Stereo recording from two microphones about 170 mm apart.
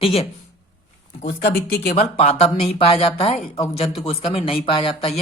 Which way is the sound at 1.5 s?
65° left (ahead or behind).